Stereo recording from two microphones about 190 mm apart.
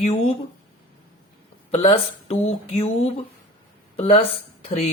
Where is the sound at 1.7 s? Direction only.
35° left (ahead or behind).